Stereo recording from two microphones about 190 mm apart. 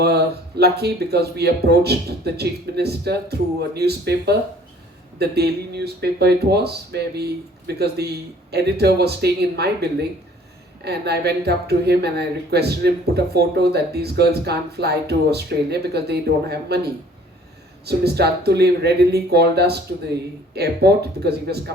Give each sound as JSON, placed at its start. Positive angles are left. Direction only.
{"t": 0.0, "sound": "speech", "side_deg": -60}